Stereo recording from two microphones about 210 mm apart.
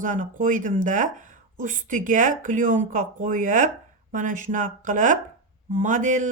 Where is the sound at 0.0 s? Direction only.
40° right (ahead or behind).